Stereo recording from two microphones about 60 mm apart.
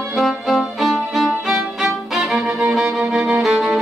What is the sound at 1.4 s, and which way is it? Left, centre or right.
Violin, centre.